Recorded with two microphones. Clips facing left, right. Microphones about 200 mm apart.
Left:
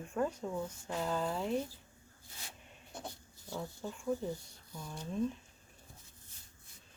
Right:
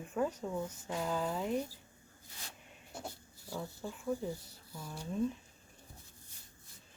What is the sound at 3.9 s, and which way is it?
Speech, 5° right (ahead or behind).